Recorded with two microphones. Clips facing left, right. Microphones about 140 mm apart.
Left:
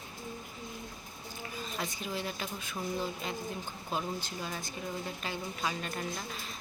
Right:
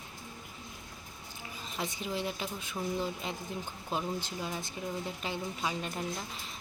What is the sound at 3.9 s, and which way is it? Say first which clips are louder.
A woman's voice: right 1 dB; 25° right (ahead or behind).